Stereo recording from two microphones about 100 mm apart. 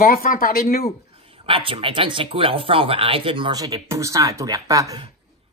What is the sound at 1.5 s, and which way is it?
Speech, 65° right (ahead or behind).